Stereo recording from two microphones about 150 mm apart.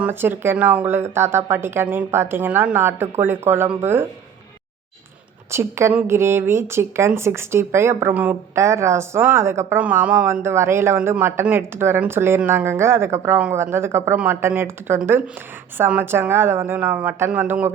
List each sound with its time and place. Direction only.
0.0 s speech: 15° right (ahead or behind)
5.5 s speech: 15° right (ahead or behind)